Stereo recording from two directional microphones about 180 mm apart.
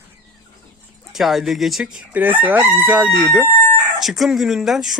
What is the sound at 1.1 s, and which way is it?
Speech, centre (ahead or behind).